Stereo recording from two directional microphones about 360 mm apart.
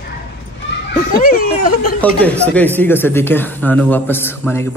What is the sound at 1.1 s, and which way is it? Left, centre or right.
Speech, left.